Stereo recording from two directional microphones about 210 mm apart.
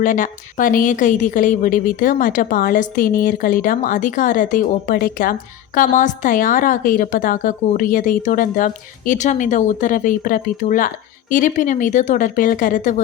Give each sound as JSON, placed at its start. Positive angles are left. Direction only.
{"t": 0.0, "sound": "a woman's voice", "side_deg": 40}